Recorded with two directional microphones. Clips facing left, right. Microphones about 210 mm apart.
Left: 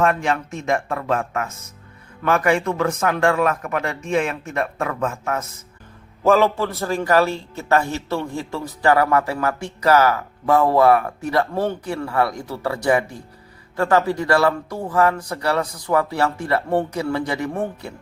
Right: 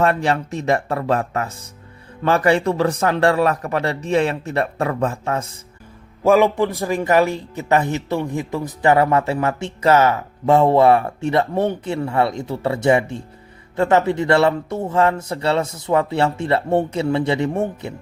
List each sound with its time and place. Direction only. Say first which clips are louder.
0.0 s a man's voice: right 2 dB; 35° right (ahead or behind)
6.2 s speech: right 2 dB; 15° right (ahead or behind)